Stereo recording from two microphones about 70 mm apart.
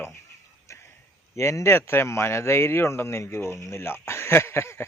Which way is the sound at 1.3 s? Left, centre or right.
Left.